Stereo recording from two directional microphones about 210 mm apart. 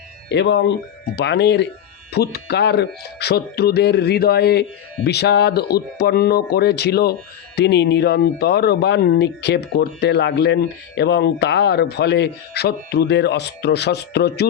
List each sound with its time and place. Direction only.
0.3 s speech: 55° left (ahead or behind)